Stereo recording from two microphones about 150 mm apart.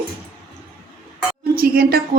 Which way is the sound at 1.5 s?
85° right.